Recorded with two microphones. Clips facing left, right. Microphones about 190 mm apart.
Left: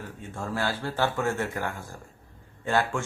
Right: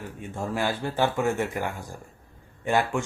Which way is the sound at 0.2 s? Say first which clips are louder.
Right 2 dB; 15° right (ahead or behind).